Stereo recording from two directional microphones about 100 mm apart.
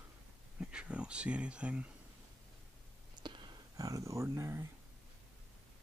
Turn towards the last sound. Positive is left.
turn(degrees=-30)  # may be behind; listen again after turning